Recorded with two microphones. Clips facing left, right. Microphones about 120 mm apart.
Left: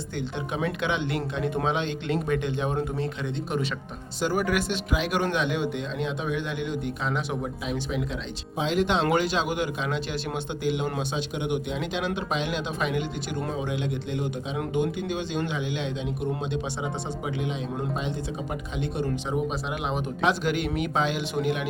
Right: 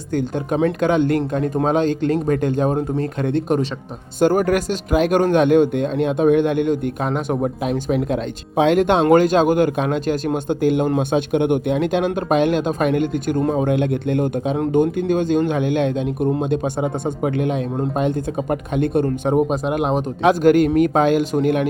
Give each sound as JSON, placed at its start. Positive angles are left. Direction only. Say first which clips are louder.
{"t": 0.1, "sound": "speech", "louder": "right 12 dB", "side_deg": -45}
{"t": 3.0, "sound": "speech", "louder": "right 9 dB", "side_deg": -50}